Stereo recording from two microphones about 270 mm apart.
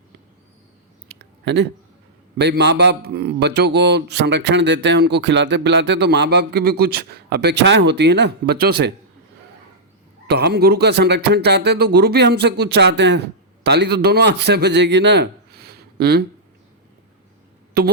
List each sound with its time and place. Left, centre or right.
1.2 s a sound: right
2.4 s a man's voice: right
10.2 s a man's voice: right
17.8 s a man's voice: right